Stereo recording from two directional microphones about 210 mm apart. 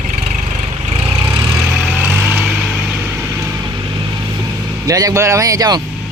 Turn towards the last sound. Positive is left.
turn(degrees=-15)  # may be behind; listen again after turning